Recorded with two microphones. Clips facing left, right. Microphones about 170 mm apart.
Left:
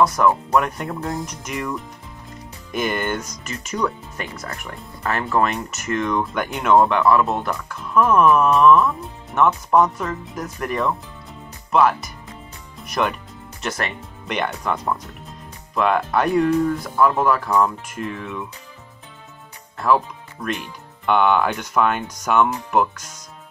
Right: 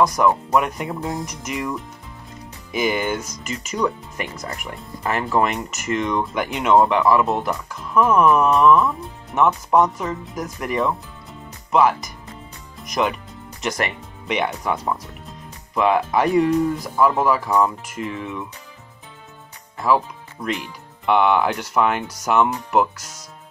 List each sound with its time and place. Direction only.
0.0 s speech: 15° right (ahead or behind)
20.4 s speech: 10° right (ahead or behind)